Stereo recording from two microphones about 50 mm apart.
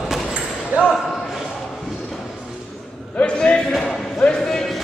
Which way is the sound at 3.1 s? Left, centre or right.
Left.